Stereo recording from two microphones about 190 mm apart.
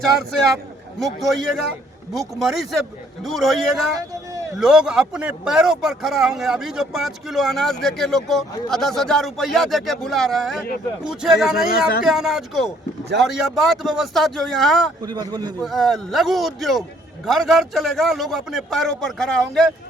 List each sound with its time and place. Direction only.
0.3 s speech: centre (ahead or behind)
3.9 s speech: 15° right (ahead or behind)
4.5 s speech: 5° right (ahead or behind)
15.0 s a man's voice: 20° right (ahead or behind)
15.6 s speech: centre (ahead or behind)